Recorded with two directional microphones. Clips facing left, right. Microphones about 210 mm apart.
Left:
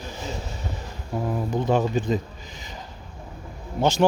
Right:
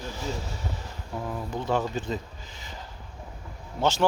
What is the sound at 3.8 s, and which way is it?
Speech, 15° left (ahead or behind).